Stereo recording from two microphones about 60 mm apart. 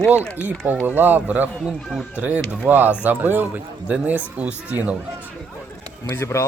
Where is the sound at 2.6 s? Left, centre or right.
Right.